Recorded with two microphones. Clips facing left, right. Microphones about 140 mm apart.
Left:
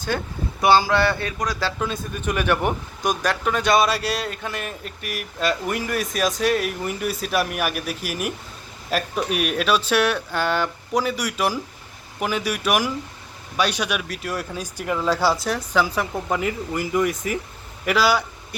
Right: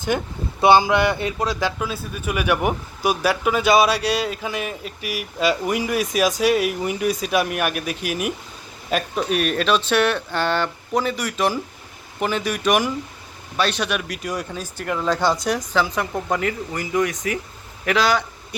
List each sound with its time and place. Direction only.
0.1 s speech: 15° right (ahead or behind)
1.8 s speech: 5° right (ahead or behind)